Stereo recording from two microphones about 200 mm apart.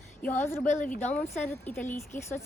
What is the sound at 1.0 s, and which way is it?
A woman's voice, 10° left (ahead or behind).